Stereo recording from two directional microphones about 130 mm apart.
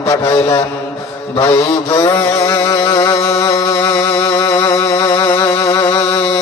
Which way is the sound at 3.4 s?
25° left (ahead or behind).